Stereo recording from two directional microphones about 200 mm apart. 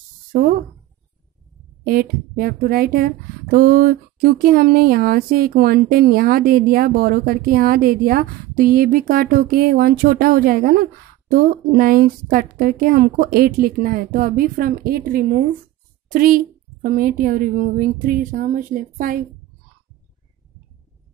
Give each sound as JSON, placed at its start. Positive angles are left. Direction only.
{"t": 0.3, "sound": "speech", "side_deg": -40}
{"t": 1.9, "sound": "speech", "side_deg": -45}